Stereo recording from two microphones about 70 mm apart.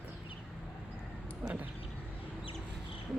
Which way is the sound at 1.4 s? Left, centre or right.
Right.